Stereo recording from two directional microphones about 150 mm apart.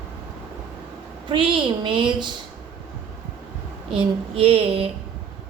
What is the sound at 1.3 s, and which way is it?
A woman's voice, 35° right (ahead or behind).